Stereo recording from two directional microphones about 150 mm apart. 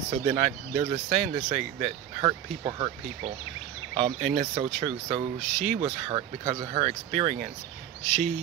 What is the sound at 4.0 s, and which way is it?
Speech, 45° right (ahead or behind).